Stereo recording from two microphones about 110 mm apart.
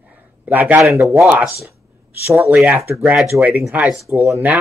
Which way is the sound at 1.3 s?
15° right (ahead or behind).